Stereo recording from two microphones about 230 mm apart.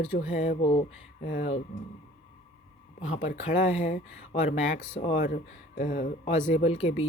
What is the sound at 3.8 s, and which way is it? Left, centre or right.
Speech, left.